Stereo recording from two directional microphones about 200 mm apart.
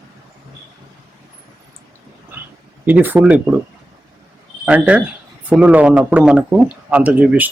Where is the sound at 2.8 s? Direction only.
10° right (ahead or behind).